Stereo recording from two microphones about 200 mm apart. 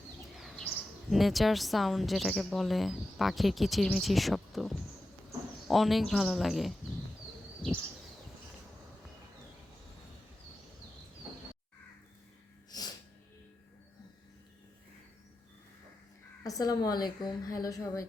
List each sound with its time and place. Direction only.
0.3 s speech: centre (ahead or behind)
12.7 s sneeze: 20° left (ahead or behind)
16.4 s speech: 15° left (ahead or behind)